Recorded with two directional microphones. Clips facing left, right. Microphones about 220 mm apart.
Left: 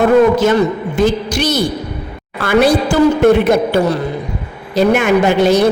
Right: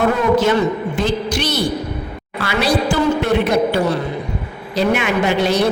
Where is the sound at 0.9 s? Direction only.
45° left (ahead or behind).